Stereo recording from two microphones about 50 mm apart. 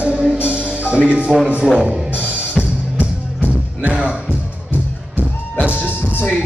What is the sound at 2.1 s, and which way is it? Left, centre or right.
Music, right.